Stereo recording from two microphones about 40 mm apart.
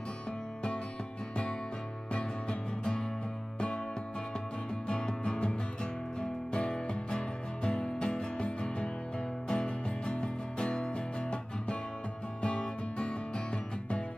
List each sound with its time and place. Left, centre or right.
4.8 s music: left
6.5 s music: left
12.4 s music: left